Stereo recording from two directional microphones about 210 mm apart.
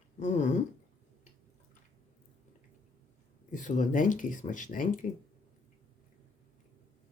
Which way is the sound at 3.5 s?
35° left (ahead or behind).